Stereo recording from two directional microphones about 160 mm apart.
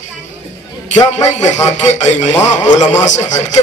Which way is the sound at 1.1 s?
45° left (ahead or behind).